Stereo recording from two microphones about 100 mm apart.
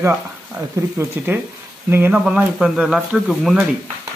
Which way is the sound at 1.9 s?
20° right (ahead or behind).